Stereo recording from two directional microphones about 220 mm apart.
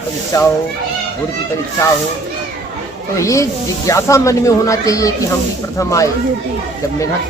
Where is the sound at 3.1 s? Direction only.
15° left (ahead or behind).